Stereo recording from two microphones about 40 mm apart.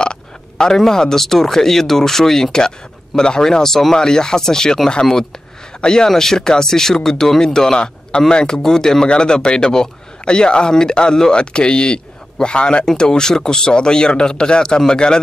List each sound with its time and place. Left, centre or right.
0.0 s speech: centre
5.8 s a man's voice: centre